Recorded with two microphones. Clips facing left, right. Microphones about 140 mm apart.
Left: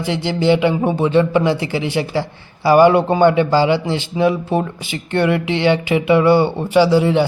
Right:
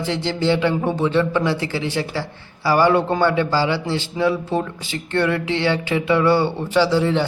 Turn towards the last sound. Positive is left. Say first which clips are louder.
# left 4 dB
turn(degrees=15)  # may be behind; listen again after turning